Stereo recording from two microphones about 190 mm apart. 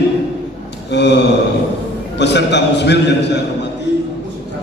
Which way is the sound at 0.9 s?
65° left (ahead or behind).